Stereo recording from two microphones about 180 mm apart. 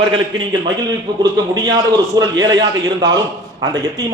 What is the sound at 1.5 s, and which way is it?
A man's voice, 20° right (ahead or behind).